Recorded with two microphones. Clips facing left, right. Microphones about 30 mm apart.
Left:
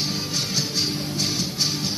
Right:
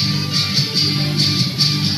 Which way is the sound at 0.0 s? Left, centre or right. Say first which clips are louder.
Right 6 dB; right.